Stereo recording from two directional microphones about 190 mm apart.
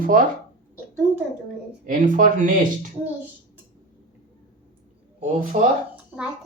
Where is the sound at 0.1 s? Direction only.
45° right (ahead or behind).